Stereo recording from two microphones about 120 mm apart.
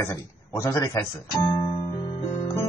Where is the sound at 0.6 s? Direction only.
30° left (ahead or behind).